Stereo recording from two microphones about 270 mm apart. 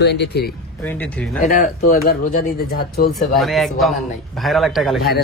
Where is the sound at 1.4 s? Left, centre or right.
Left.